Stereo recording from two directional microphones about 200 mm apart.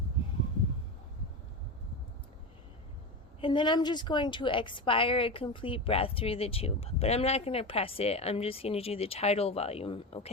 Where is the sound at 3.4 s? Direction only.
25° left (ahead or behind).